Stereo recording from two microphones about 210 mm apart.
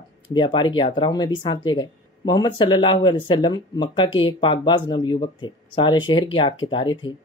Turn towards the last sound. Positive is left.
turn(degrees=20)  # may be behind; listen again after turning